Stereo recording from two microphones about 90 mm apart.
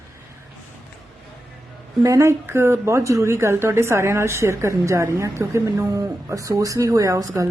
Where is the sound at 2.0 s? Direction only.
30° right (ahead or behind).